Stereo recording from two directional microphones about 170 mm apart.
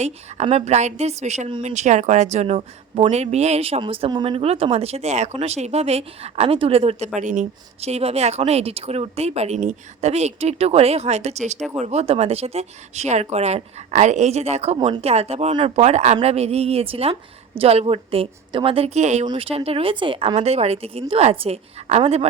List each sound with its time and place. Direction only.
0.0 s speech: 40° right (ahead or behind)
7.2 s speech: 45° right (ahead or behind)